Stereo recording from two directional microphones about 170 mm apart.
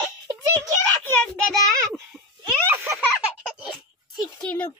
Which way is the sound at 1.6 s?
20° right (ahead or behind).